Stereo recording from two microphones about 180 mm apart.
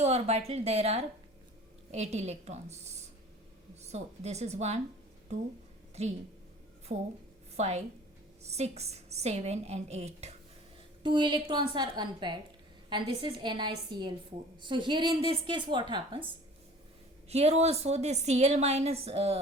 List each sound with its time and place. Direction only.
0.0 s a woman's voice: 35° right (ahead or behind)
5.9 s a woman's voice: 35° right (ahead or behind)
11.0 s a woman's voice: 25° right (ahead or behind)
17.2 s a woman's voice: 35° right (ahead or behind)